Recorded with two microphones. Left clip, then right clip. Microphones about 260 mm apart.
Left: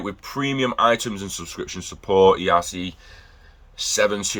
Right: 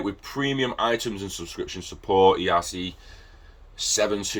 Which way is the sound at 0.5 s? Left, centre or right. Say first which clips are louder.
Left 7 dB; centre.